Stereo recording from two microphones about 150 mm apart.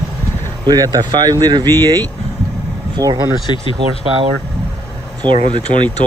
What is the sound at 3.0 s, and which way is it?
Speech, 20° right (ahead or behind).